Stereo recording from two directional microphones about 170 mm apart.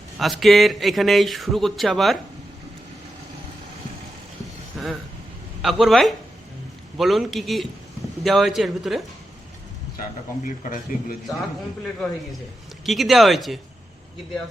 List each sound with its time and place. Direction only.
0.2 s speech: centre (ahead or behind)
4.7 s vehicle: centre (ahead or behind)
5.6 s speech: centre (ahead or behind)
10.4 s a man's voice: 50° left (ahead or behind)
12.8 s speech: centre (ahead or behind)